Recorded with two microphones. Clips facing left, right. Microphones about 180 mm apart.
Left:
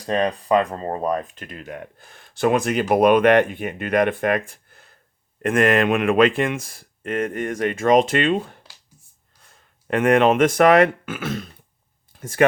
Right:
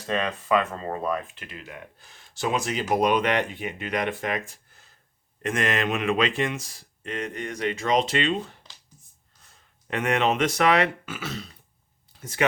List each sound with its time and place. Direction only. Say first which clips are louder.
0.0 s speech: left 6 dB; 35° left (ahead or behind); by 8.5 s 55° left (ahead or behind)
9.9 s speech: left 8 dB; 50° left (ahead or behind)